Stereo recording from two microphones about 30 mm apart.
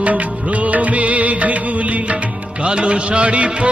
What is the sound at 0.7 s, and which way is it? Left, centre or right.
Music, right.